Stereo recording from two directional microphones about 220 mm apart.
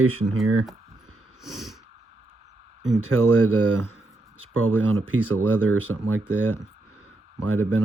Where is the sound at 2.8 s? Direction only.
Centre (ahead or behind).